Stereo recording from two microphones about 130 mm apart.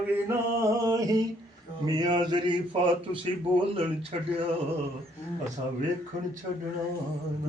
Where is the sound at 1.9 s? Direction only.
35° right (ahead or behind).